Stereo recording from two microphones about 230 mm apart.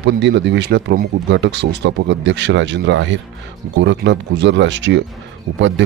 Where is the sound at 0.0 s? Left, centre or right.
Right.